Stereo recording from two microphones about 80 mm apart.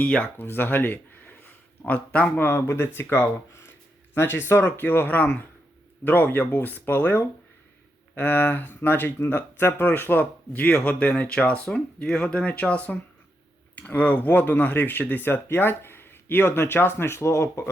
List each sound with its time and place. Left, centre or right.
0.0 s speech: centre
2.6 s speech: left